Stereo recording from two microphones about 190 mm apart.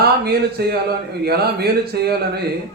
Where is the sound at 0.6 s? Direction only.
55° right (ahead or behind).